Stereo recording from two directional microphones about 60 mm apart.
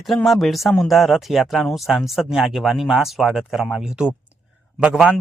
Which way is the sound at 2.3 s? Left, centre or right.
Centre.